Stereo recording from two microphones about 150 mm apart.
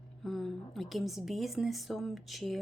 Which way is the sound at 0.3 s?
Centre (ahead or behind).